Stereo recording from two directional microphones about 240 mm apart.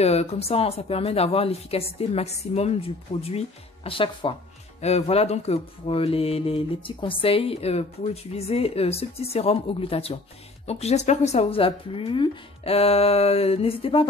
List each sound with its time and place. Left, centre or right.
0.0 s speech: left